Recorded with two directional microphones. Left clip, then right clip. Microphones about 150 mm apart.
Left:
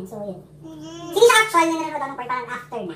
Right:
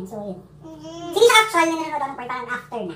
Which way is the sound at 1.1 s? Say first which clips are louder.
Even; centre (ahead or behind).